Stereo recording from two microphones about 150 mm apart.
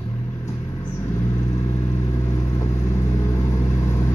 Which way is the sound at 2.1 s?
20° left (ahead or behind).